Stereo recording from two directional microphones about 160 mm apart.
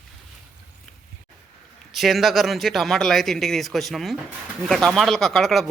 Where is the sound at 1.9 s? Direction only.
Centre (ahead or behind).